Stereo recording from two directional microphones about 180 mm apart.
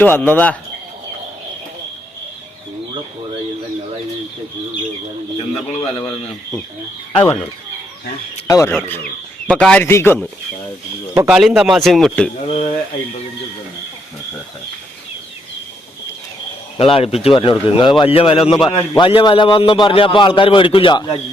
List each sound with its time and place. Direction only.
0.0 s a man's voice: 10° left (ahead or behind)
5.6 s a man's voice: 35° left (ahead or behind)
5.9 s a man's voice: 20° left (ahead or behind)
7.1 s a man's voice: 10° left (ahead or behind)
8.4 s speech: 20° left (ahead or behind)
9.5 s a man's voice: 5° left (ahead or behind)
11.1 s speech: 15° right (ahead or behind)
11.3 s speech: 5° right (ahead or behind)
12.5 s a man's voice: 40° left (ahead or behind)
16.7 s a man's voice: 30° left (ahead or behind)